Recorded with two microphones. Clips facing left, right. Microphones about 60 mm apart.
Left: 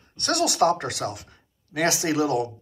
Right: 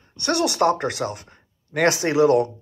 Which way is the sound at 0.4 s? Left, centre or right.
Right.